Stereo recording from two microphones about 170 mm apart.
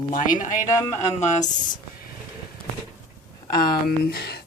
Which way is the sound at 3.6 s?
65° left (ahead or behind).